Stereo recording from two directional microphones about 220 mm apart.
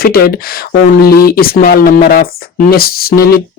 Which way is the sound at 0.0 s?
45° left (ahead or behind).